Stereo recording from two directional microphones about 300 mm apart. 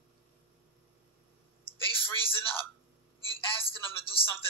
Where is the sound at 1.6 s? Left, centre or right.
Centre.